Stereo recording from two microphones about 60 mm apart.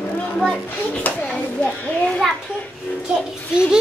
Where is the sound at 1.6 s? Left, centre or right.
Left.